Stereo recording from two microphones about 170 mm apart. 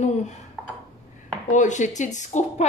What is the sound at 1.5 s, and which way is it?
Speech, 45° left (ahead or behind).